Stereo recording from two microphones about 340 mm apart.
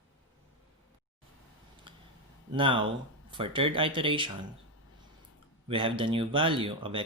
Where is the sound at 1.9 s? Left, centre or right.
Centre.